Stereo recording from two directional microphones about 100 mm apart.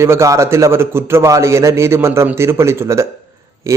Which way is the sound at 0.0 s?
30° right (ahead or behind).